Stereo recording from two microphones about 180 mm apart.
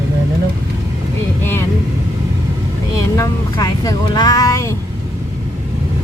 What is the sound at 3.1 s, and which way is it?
Speech, 20° left (ahead or behind).